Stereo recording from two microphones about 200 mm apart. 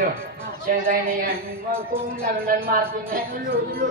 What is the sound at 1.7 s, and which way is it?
Speech, 10° right (ahead or behind).